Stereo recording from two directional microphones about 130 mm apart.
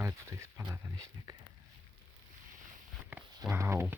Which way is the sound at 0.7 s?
25° right (ahead or behind).